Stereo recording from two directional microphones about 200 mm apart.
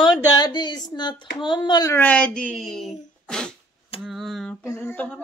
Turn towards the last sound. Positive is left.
turn(degrees=10)  # may be behind; listen again after turning